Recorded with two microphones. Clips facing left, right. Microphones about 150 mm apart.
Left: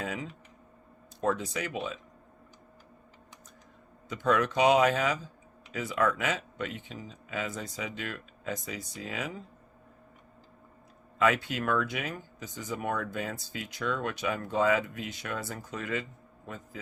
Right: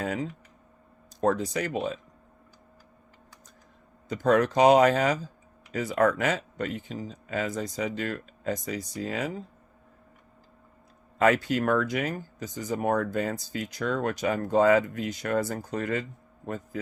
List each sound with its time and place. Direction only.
0.0 s typing: 40° right (ahead or behind)
1.2 s speech: 40° right (ahead or behind)
4.1 s speech: 40° right (ahead or behind)
11.2 s a man's voice: 40° right (ahead or behind)